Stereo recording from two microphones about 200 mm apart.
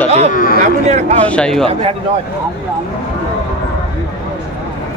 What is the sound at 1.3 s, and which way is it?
Speech, 5° left (ahead or behind).